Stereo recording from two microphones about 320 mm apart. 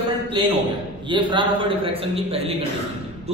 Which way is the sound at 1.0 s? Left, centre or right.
Centre.